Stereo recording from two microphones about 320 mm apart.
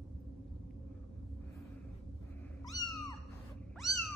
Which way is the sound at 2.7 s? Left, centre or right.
Centre.